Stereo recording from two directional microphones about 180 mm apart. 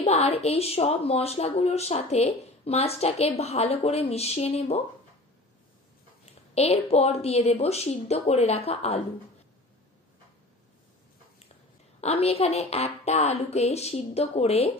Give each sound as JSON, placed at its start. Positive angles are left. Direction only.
{"t": 0.0, "sound": "a woman's voice", "side_deg": 35}
{"t": 6.2, "sound": "a woman's voice", "side_deg": 35}
{"t": 12.0, "sound": "a woman's voice", "side_deg": 35}